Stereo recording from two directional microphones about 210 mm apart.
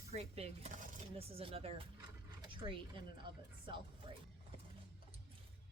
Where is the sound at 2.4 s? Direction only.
25° right (ahead or behind).